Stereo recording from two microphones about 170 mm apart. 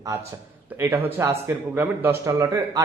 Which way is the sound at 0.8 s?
15° right (ahead or behind).